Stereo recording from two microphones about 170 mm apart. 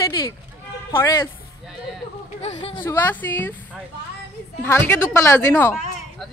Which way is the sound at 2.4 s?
30° left (ahead or behind).